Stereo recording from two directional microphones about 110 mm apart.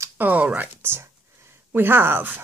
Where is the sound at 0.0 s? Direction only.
15° right (ahead or behind).